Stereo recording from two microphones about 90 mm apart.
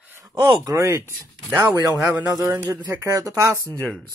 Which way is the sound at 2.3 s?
40° right (ahead or behind).